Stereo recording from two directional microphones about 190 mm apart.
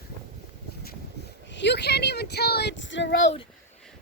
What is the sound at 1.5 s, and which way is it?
Speech, 65° left (ahead or behind).